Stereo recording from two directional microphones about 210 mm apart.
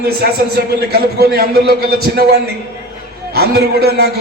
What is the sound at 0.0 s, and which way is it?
A man's voice, 50° right (ahead or behind).